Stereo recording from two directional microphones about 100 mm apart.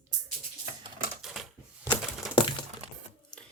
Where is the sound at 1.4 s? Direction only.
Centre (ahead or behind).